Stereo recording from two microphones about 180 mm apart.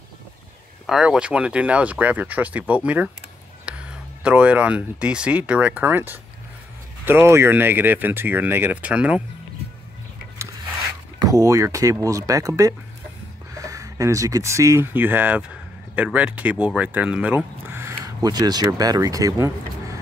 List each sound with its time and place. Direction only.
0.8 s speech: 5° right (ahead or behind)
11.1 s speech: 20° right (ahead or behind)